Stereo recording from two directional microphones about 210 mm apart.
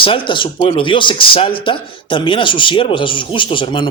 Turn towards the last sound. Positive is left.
turn(degrees=25)  # may be behind; listen again after turning